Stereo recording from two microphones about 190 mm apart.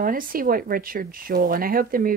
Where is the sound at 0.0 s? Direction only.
50° right (ahead or behind).